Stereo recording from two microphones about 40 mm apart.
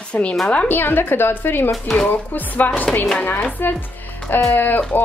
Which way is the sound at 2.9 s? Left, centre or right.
Centre.